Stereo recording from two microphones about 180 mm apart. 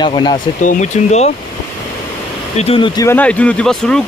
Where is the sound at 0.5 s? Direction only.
45° left (ahead or behind).